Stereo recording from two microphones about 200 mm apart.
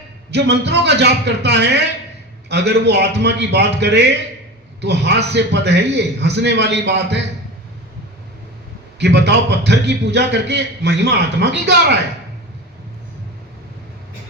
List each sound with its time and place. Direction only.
0.3 s a man's voice: 60° right (ahead or behind)
9.0 s a man's voice: 55° right (ahead or behind)